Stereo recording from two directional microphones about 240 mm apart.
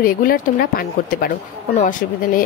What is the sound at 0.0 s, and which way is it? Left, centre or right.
A child's voice, left.